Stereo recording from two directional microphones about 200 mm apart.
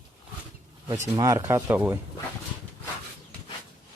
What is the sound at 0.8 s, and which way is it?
Speech, 15° right (ahead or behind).